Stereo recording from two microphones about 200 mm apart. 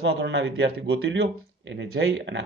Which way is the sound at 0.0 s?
60° right (ahead or behind).